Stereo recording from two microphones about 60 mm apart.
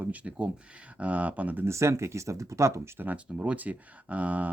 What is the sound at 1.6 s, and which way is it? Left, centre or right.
Speech, right.